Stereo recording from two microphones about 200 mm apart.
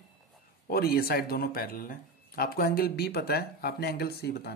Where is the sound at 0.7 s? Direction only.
50° left (ahead or behind).